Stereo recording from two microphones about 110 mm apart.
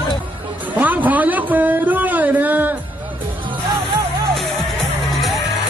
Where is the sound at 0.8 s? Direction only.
15° right (ahead or behind).